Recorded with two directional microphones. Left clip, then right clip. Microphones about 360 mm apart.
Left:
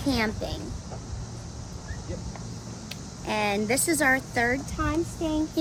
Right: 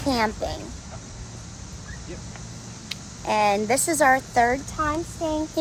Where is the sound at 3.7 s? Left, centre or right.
Centre.